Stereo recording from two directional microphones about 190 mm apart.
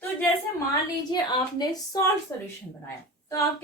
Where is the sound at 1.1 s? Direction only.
20° left (ahead or behind).